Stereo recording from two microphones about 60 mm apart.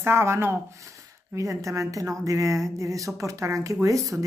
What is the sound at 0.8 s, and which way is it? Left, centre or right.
Speech, right.